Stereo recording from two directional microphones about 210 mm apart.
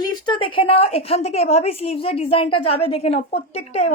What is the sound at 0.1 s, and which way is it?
A woman's voice, 25° left (ahead or behind).